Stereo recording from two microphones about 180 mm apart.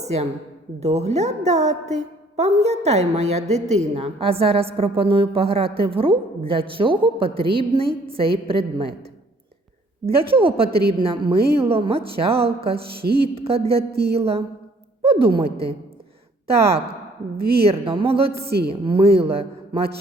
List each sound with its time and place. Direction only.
0.0 s a woman's voice: 40° right (ahead or behind)
10.2 s a woman's voice: 30° right (ahead or behind)
10.7 s a woman's voice: 60° right (ahead or behind)
10.9 s a woman's voice: 30° right (ahead or behind)
13.0 s a woman's voice: 60° right (ahead or behind)
13.2 s a woman's voice: 35° right (ahead or behind)
13.7 s a woman's voice: 60° right (ahead or behind)
14.2 s a woman's voice: 35° right (ahead or behind)
17.3 s a woman's voice: 60° right (ahead or behind)
17.7 s a woman's voice: 30° right (ahead or behind)